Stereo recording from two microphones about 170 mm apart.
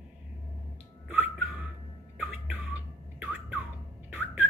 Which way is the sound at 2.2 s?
10° right (ahead or behind).